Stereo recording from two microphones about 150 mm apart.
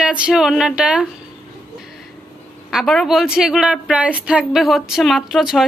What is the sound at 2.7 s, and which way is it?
Speech, centre (ahead or behind).